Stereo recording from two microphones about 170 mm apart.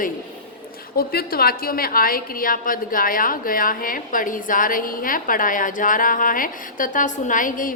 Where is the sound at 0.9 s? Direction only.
60° left (ahead or behind).